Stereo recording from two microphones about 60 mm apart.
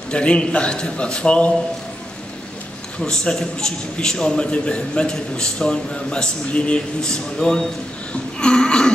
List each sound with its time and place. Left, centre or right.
0.1 s a man's voice: centre
3.0 s a man's voice: centre
8.1 s throat clearing: centre